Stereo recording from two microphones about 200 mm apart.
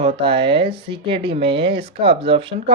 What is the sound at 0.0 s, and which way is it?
Speech, 25° right (ahead or behind).